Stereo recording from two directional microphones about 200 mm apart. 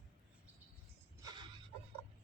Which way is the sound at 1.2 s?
20° right (ahead or behind).